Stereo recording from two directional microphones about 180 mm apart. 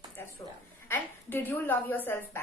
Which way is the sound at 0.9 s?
10° left (ahead or behind).